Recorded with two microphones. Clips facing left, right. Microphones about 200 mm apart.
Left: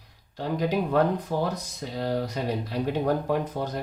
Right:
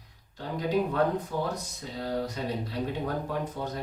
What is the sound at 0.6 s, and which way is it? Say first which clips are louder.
Speech: left 2 dB; 80° left.